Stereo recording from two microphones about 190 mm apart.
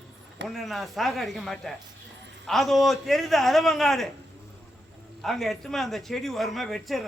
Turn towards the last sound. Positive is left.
turn(degrees=0)  # may be behind; listen again after turning